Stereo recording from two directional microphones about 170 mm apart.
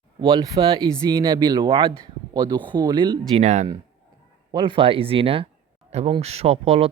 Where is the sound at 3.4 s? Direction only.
45° right (ahead or behind).